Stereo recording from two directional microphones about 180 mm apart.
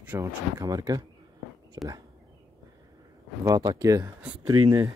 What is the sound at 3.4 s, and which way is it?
Speech, 20° right (ahead or behind).